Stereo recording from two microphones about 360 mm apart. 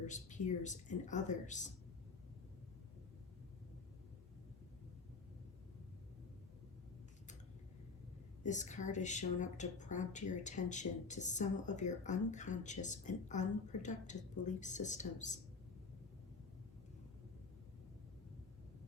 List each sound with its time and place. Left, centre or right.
0.0 s speech: centre
8.4 s speech: centre